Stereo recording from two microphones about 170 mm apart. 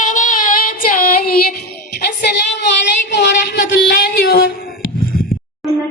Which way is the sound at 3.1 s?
75° left (ahead or behind).